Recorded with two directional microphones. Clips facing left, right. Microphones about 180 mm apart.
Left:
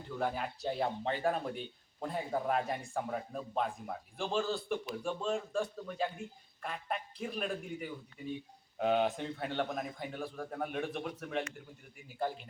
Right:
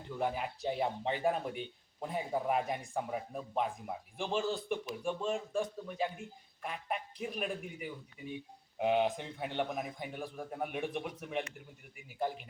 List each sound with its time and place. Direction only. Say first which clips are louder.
0.2 s speech: even; 15° right (ahead or behind)